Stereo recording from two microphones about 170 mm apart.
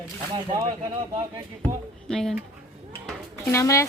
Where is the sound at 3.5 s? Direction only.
15° left (ahead or behind).